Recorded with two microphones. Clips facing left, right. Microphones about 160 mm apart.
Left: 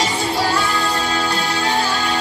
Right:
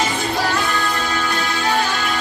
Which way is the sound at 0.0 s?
35° left (ahead or behind).